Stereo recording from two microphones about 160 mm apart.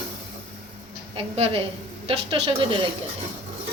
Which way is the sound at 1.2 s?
35° right (ahead or behind).